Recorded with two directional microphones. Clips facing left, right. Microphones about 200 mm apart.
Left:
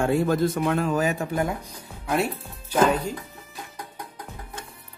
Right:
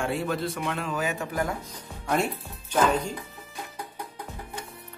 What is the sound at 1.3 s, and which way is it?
Speech, 20° left (ahead or behind).